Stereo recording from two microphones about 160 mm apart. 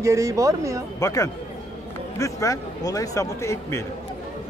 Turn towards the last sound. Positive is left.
turn(degrees=15)  # may be behind; listen again after turning